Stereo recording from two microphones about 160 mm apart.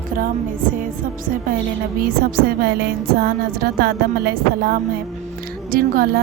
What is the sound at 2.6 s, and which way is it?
Speech, 75° right (ahead or behind).